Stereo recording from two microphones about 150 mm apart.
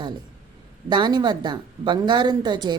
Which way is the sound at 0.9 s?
30° right (ahead or behind).